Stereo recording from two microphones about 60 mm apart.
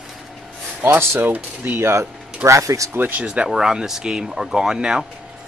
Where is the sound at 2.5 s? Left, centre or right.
Right.